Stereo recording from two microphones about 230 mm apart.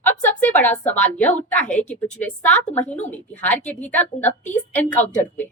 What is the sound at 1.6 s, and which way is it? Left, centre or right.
Speech, left.